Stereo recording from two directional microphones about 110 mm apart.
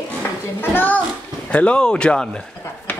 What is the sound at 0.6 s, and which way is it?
A child's voice, 15° left (ahead or behind).